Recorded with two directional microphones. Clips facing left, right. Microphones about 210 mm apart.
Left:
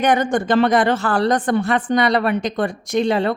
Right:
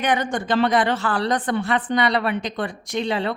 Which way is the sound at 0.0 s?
45° left (ahead or behind).